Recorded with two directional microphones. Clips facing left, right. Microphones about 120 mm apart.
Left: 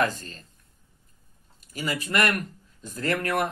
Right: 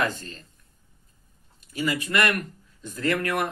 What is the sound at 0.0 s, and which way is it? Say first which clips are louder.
Speech: left 1 dB; 40° left (ahead or behind).